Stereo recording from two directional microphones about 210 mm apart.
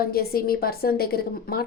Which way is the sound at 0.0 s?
45° left (ahead or behind).